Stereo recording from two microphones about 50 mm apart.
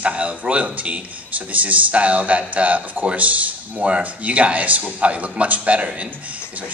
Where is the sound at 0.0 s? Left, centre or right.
Right.